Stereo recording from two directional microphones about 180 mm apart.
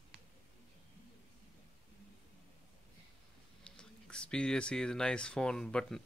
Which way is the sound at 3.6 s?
5° left (ahead or behind).